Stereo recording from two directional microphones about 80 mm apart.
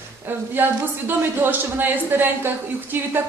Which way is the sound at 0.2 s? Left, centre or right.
Right.